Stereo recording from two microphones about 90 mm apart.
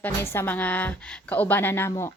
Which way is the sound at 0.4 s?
20° left (ahead or behind).